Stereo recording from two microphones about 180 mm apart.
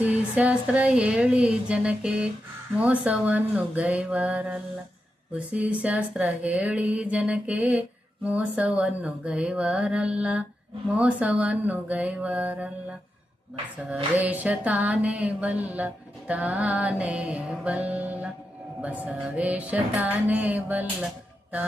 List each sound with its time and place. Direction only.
0.0 s speech: 10° right (ahead or behind)
13.9 s speech: 10° right (ahead or behind)